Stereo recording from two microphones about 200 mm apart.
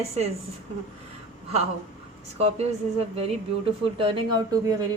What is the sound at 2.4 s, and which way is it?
Speech, 30° right (ahead or behind).